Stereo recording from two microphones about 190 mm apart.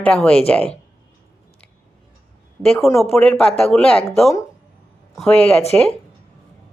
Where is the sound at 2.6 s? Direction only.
5° left (ahead or behind).